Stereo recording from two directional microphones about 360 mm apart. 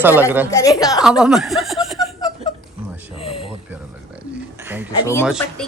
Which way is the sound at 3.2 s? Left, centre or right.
Centre.